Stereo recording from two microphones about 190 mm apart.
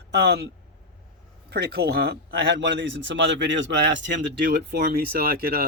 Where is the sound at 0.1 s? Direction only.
60° right (ahead or behind).